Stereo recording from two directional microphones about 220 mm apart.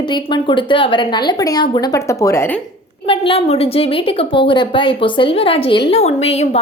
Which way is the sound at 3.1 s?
25° left (ahead or behind).